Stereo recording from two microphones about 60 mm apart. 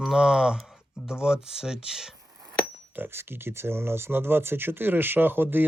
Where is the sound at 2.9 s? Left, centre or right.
Right.